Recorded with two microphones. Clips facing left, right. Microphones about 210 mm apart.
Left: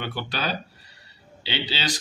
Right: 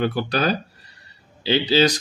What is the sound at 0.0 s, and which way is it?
Speech, 40° right (ahead or behind).